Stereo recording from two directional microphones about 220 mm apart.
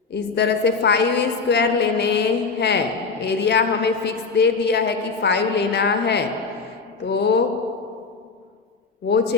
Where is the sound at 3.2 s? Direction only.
50° left (ahead or behind).